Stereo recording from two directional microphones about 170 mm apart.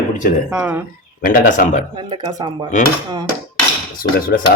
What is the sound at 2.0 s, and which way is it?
Speech, 25° right (ahead or behind).